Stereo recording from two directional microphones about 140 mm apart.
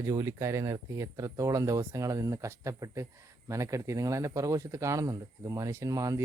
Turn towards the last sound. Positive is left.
turn(degrees=-25)  # may be behind; listen again after turning